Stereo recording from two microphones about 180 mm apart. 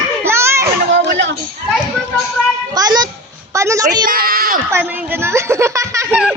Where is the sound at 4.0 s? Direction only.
55° right (ahead or behind).